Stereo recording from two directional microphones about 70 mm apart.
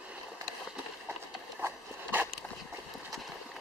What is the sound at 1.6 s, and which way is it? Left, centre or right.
Dog, right.